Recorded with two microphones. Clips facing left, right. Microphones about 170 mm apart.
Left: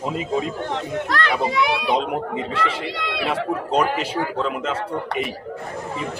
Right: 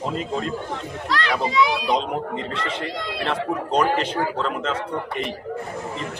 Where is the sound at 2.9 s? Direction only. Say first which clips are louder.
Left 1 dB; 75° left (ahead or behind).